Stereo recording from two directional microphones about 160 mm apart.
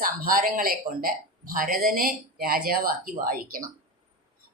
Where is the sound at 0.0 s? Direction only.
60° right (ahead or behind).